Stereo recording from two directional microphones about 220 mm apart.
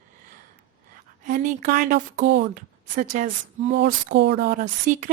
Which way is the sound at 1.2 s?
35° right (ahead or behind).